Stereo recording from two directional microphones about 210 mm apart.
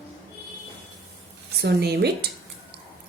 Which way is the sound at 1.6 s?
50° right (ahead or behind).